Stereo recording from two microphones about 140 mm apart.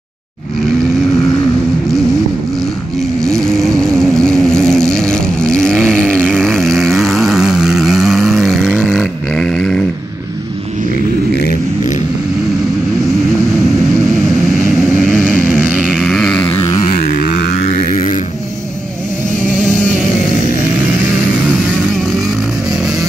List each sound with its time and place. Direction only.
3.2 s vehicle: 5° left (ahead or behind)
15.0 s vehicle: 5° left (ahead or behind)
15.3 s vehicle: 10° right (ahead or behind)
16.0 s a sound: 5° left (ahead or behind)
16.6 s music: 50° left (ahead or behind)
17.2 s a sound: 80° left
19.6 s vehicle: 5° left (ahead or behind)